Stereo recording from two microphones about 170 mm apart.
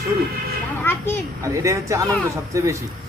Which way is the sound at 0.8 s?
10° left (ahead or behind).